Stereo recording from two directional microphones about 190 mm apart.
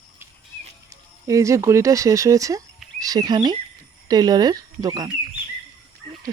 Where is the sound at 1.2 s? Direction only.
15° right (ahead or behind).